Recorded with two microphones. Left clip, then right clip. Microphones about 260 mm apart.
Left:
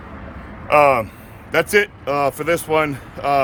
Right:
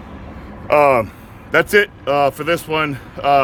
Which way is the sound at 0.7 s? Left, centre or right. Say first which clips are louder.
Right 1 dB; centre.